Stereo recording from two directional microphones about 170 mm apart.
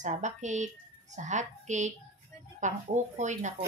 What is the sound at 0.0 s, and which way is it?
Speech, 45° right (ahead or behind).